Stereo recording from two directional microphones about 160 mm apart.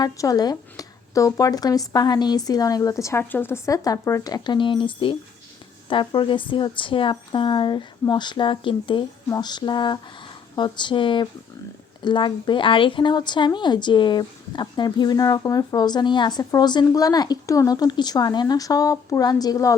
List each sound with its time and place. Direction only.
0.0 s a woman's voice: 25° left (ahead or behind)